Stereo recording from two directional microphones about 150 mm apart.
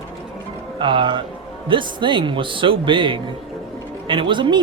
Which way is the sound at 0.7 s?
30° right (ahead or behind).